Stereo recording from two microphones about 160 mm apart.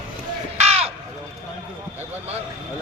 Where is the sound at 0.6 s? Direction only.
40° right (ahead or behind).